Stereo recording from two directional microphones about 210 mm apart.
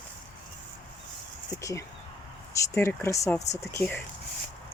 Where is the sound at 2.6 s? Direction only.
10° left (ahead or behind).